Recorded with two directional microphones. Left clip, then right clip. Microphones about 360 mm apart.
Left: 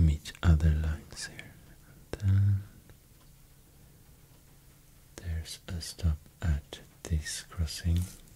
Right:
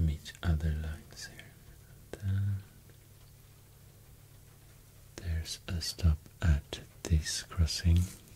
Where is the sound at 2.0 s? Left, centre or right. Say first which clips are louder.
Left 6 dB; centre.